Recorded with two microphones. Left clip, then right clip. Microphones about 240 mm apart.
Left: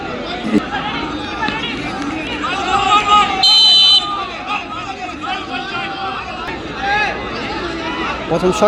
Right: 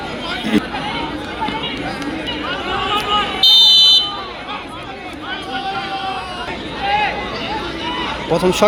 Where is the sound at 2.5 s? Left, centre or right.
Left.